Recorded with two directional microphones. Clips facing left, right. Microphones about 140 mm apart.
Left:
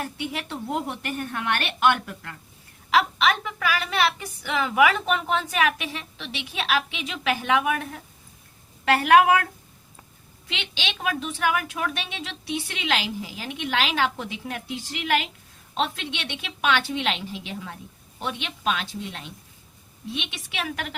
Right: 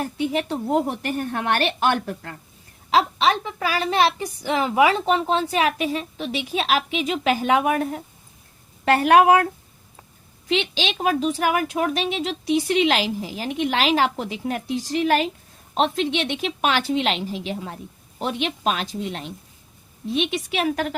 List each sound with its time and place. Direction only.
0.0 s speech: 35° right (ahead or behind)
10.5 s speech: 40° right (ahead or behind)